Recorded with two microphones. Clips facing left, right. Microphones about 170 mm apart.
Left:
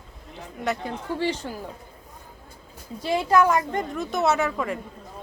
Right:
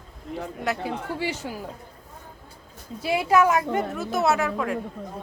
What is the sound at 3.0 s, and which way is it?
Speech, 10° right (ahead or behind).